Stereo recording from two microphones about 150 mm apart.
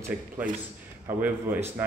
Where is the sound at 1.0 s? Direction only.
15° right (ahead or behind).